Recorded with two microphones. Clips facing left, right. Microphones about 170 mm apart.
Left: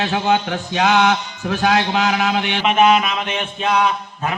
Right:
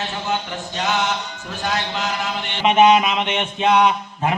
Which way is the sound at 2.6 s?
25° right (ahead or behind).